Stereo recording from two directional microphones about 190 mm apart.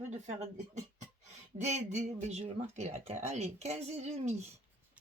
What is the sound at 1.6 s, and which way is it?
Speech, 35° right (ahead or behind).